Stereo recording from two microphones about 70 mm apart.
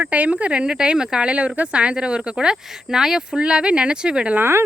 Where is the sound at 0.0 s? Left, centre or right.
Right.